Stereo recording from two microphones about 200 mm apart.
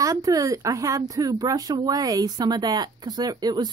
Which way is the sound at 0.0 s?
15° right (ahead or behind).